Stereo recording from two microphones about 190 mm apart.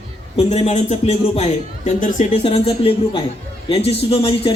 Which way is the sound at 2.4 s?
30° left (ahead or behind).